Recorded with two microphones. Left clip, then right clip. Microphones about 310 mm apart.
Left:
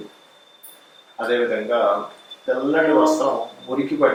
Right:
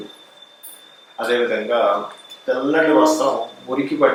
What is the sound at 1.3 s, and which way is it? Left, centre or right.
A man's voice, centre.